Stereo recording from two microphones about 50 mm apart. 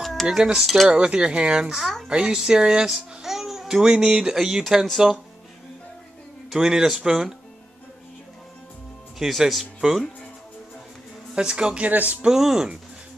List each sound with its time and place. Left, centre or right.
0.0 s cowbell: centre
0.3 s speech: centre
6.5 s speech: centre
9.2 s speech: centre
11.3 s speech: centre
11.9 s speech: right
12.3 s speech: centre